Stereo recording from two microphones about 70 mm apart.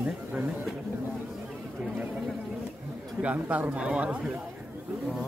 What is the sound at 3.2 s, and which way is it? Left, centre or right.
Speech, centre.